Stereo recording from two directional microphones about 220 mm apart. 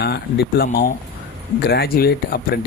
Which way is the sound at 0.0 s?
45° left (ahead or behind).